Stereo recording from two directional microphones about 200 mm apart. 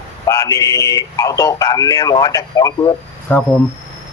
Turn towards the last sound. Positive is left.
turn(degrees=5)  # may be behind; listen again after turning